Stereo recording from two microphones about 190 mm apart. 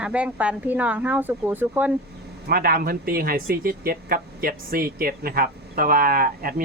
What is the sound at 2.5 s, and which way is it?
Speech, 55° right (ahead or behind).